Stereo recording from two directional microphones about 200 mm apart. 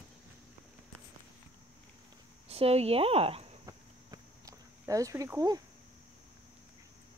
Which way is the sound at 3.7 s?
15° right (ahead or behind).